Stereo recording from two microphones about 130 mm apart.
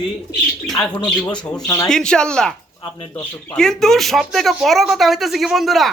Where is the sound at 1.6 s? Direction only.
25° left (ahead or behind).